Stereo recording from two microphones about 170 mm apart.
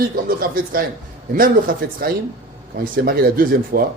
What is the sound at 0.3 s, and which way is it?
Speech, 60° right (ahead or behind).